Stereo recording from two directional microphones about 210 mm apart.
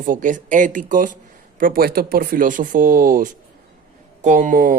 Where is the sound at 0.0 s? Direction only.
40° right (ahead or behind).